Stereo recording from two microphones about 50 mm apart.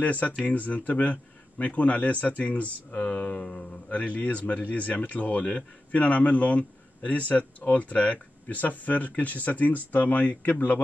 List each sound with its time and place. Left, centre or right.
0.0 s speech: left